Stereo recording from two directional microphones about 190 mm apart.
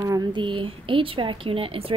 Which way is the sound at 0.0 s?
20° right (ahead or behind).